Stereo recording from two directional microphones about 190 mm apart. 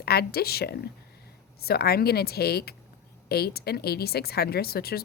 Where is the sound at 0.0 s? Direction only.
55° left (ahead or behind).